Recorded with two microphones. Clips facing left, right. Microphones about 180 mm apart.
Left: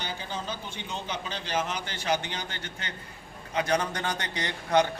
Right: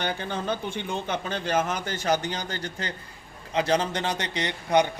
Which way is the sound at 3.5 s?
30° right (ahead or behind).